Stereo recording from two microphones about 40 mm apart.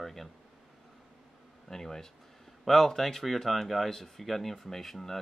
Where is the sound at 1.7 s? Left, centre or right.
Centre.